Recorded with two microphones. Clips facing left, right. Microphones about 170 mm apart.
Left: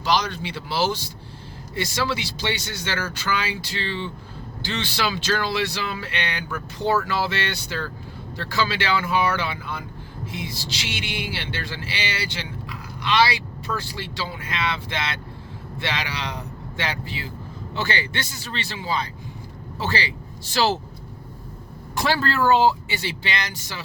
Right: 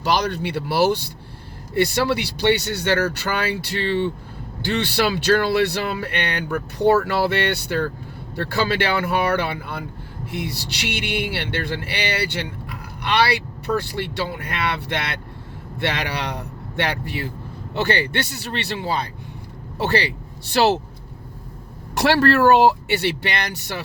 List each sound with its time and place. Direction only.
0.0 s speech: 60° right (ahead or behind)
21.9 s speech: 70° right (ahead or behind)